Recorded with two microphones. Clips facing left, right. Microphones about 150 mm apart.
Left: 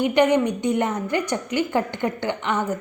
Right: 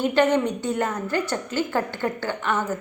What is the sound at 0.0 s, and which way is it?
A woman's voice, 15° left (ahead or behind).